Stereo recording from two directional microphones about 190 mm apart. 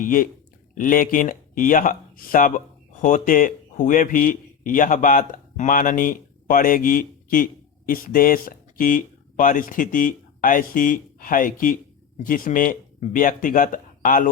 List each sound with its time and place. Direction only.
0.0 s speech: 45° left (ahead or behind)